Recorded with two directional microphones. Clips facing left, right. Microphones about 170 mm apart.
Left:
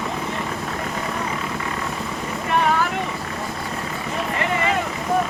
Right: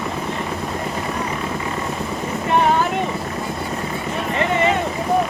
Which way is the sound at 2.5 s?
25° right (ahead or behind).